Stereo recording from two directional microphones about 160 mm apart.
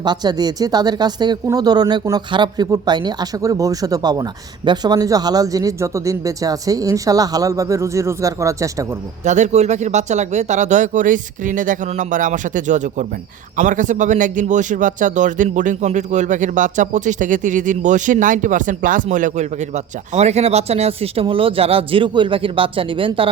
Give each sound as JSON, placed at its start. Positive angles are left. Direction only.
{"t": 0.0, "sound": "speech", "side_deg": -25}
{"t": 9.2, "sound": "a man's voice", "side_deg": -50}